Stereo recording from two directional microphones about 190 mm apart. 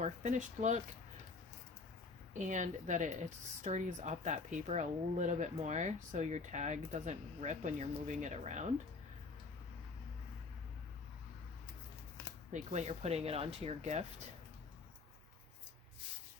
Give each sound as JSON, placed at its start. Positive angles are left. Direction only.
{"t": 0.0, "sound": "speech", "side_deg": -40}
{"t": 2.5, "sound": "speech", "side_deg": -40}
{"t": 12.5, "sound": "speech", "side_deg": -40}